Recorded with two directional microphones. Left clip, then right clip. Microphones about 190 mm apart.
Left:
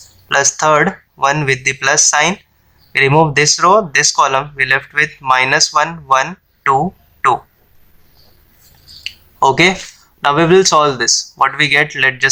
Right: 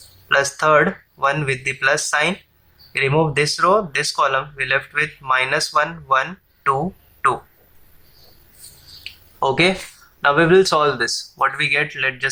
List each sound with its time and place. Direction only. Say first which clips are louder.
0.3 s speech: left 4 dB; 25° left (ahead or behind)
9.0 s a sound: left 8 dB; 25° left (ahead or behind)
10.2 s speech: left 3 dB; 25° left (ahead or behind)